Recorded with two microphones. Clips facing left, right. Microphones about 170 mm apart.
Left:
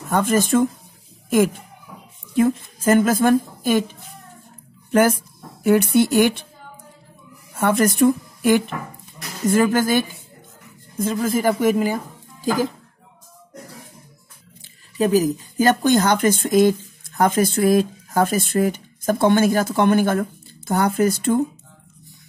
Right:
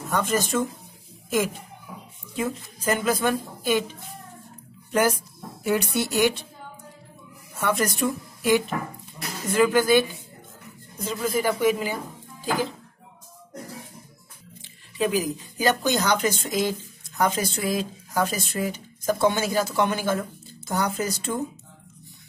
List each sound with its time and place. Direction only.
0.1 s speech: 50° left (ahead or behind)
2.3 s speech: 50° left (ahead or behind)
5.6 s speech: 55° left (ahead or behind)
7.5 s speech: 55° left (ahead or behind)
15.0 s speech: 40° left (ahead or behind)